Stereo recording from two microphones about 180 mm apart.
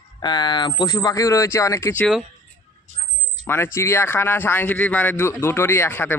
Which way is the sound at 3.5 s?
15° left (ahead or behind).